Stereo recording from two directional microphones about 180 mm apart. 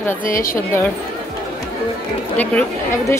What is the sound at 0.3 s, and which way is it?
Speech, 50° left (ahead or behind).